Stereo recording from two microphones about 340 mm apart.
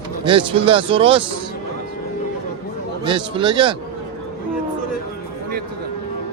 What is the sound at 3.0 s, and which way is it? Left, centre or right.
Speech, centre.